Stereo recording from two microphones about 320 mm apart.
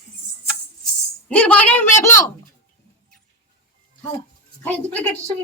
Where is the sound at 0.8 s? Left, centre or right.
Centre.